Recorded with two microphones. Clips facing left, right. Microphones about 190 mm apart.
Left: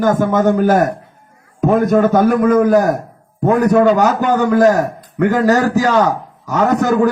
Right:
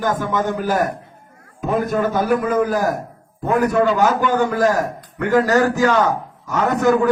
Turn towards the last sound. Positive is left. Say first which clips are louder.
# left 2 dB
turn(degrees=40)  # may be behind; listen again after turning